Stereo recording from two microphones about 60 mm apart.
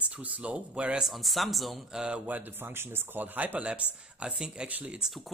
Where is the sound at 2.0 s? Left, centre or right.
Centre.